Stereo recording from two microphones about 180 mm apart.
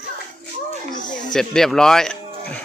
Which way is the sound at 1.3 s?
Centre (ahead or behind).